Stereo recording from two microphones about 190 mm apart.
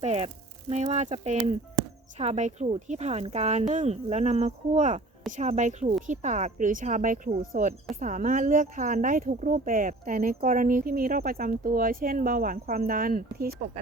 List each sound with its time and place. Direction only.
0.0 s speech: 30° right (ahead or behind); by 13.6 s 50° right (ahead or behind)